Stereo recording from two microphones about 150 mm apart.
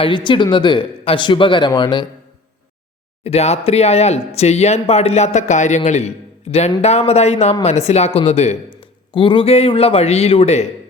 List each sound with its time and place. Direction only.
0.0 s speech: 30° left (ahead or behind)
3.2 s speech: 45° left (ahead or behind)
9.1 s speech: 35° left (ahead or behind)